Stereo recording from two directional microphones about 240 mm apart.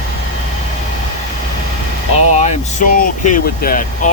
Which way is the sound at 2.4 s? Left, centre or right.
Left.